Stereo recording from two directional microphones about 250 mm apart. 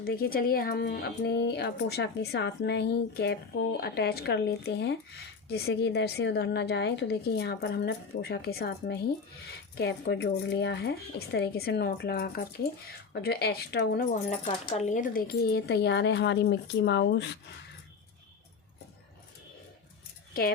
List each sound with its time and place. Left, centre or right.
0.0 s speech: left
14.1 s speech: left
20.4 s speech: left